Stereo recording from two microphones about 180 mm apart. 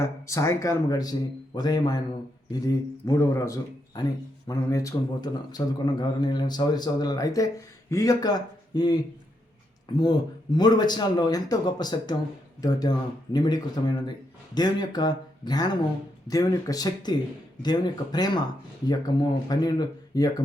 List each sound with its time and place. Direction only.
0.0 s a man's voice: 15° left (ahead or behind)